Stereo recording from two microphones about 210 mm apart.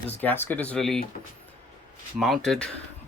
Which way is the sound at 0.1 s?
10° left (ahead or behind).